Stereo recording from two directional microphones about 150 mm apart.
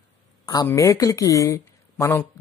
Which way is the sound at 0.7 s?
20° left (ahead or behind).